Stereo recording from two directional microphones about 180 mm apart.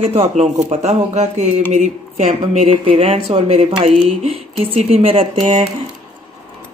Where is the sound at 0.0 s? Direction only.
35° right (ahead or behind).